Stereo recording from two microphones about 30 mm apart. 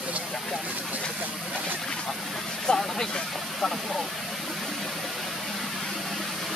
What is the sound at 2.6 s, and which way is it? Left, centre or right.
Vehicle, centre.